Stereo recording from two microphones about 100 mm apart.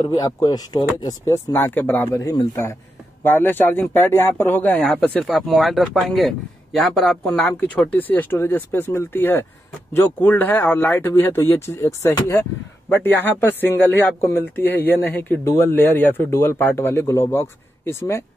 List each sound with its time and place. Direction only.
0.0 s speech: 40° left (ahead or behind)
1.2 s a man's voice: 25° left (ahead or behind)
3.3 s a man's voice: 20° left (ahead or behind)
5.2 s a man's voice: centre (ahead or behind); by 18.2 s 25° left (ahead or behind)